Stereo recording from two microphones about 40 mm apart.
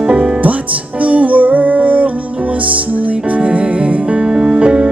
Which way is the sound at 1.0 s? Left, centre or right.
Right.